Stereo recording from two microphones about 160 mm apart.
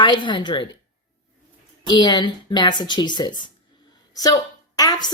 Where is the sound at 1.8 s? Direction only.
30° left (ahead or behind).